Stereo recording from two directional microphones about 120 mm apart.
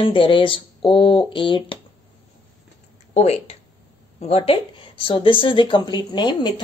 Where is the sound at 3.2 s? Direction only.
60° left (ahead or behind); by 6.5 s 40° left (ahead or behind).